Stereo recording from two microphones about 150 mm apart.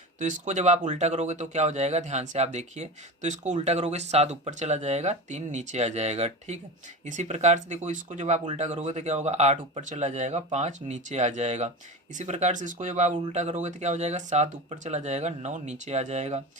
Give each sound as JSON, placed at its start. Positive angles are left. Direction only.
{"t": 0.2, "sound": "speech", "side_deg": -55}